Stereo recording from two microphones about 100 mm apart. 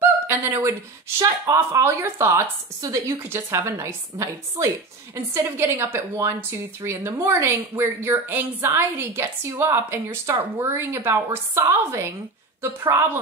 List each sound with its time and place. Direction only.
0.3 s speech: 30° right (ahead or behind)